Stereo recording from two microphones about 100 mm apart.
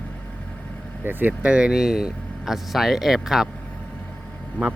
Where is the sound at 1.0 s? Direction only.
20° right (ahead or behind); by 3.5 s 5° right (ahead or behind).